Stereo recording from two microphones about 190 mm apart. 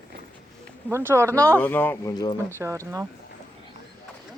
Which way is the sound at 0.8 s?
10° right (ahead or behind).